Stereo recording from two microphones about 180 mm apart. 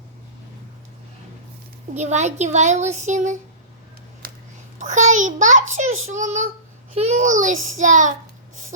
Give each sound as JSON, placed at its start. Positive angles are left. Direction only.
{"t": 2.0, "sound": "a woman's voice", "side_deg": -40}
{"t": 4.2, "sound": "a sound", "side_deg": -55}
{"t": 4.8, "sound": "a child's voice", "side_deg": -40}